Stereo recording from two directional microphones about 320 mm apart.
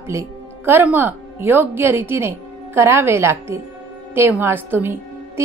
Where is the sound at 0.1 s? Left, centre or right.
Centre.